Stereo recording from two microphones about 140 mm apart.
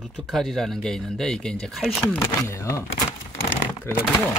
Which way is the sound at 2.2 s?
20° left (ahead or behind).